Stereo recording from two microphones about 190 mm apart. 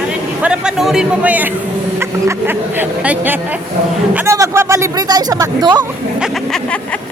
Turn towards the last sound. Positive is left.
turn(degrees=-20)  # may be behind; listen again after turning